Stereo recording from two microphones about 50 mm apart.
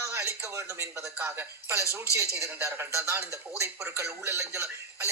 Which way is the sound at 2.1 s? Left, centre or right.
Right.